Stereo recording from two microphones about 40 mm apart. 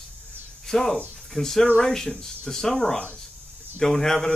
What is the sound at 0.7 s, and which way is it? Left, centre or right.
Speech, centre.